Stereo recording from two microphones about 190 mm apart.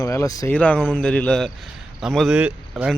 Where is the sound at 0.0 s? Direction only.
15° left (ahead or behind).